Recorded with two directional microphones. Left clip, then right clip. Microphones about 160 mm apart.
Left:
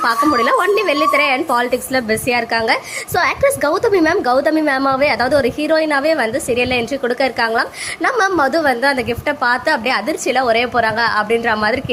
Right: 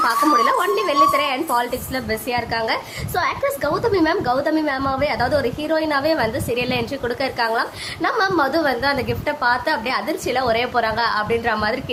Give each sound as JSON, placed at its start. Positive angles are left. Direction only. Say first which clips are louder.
{"t": 0.0, "sound": "a woman's voice", "louder": "left 2 dB", "side_deg": 25}